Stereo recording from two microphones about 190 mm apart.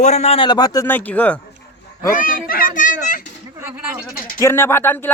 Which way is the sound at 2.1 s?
45° left (ahead or behind).